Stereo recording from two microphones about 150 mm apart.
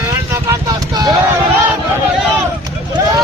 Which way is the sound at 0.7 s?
25° right (ahead or behind).